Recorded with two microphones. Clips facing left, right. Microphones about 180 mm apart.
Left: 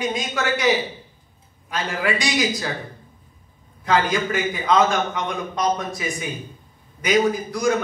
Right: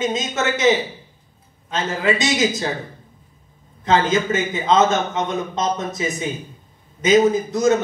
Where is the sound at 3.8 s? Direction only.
25° right (ahead or behind).